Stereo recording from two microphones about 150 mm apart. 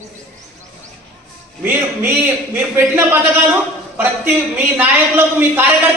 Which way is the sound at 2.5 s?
15° right (ahead or behind).